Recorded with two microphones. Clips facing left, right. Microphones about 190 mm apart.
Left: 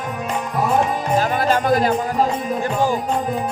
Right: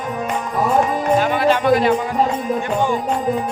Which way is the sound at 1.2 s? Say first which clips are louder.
Right 2 dB; 40° left (ahead or behind).